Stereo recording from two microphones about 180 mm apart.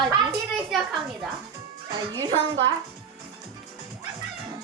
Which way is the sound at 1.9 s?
20° right (ahead or behind).